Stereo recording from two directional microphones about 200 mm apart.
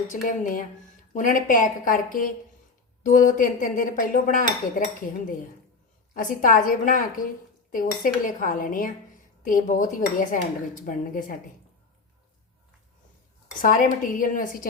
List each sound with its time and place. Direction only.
0.1 s speech: 40° left (ahead or behind)
6.1 s speech: 40° left (ahead or behind)
13.6 s speech: 40° left (ahead or behind)